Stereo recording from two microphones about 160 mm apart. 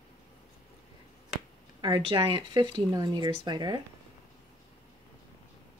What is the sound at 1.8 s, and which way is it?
Speech, 30° right (ahead or behind).